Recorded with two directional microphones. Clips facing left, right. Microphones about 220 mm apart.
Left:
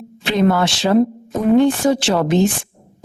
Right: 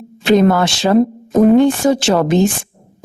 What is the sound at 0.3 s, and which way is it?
A woman's voice, 45° right (ahead or behind).